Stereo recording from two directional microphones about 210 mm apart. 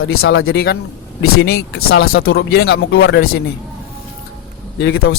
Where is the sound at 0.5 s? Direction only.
50° left (ahead or behind).